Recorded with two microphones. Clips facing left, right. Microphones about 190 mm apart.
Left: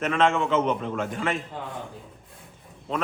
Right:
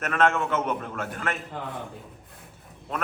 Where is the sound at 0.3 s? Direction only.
5° right (ahead or behind).